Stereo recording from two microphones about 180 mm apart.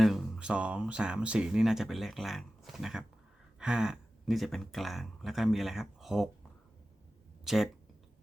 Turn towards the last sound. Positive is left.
turn(degrees=0)  # may be behind; listen again after turning